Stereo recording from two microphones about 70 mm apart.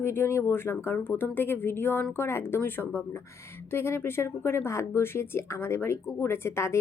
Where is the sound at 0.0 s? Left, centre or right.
Left.